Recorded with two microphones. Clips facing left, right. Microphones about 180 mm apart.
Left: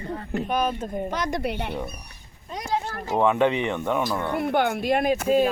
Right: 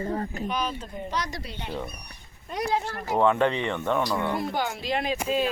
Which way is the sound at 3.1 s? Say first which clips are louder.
Left 2 dB; 15° left (ahead or behind).